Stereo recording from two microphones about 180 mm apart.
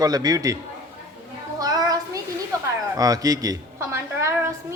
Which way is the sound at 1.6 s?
20° right (ahead or behind).